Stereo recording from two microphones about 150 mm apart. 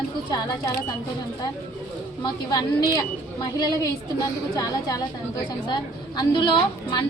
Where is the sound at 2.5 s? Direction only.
25° left (ahead or behind).